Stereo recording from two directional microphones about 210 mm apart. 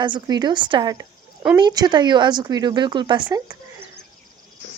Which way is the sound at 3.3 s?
15° right (ahead or behind).